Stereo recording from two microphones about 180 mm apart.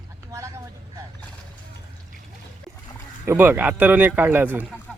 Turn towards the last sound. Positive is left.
turn(degrees=-10)  # may be behind; listen again after turning